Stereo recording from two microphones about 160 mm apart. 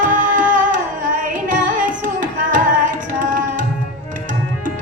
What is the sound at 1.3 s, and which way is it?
Carnatic music, 55° right (ahead or behind).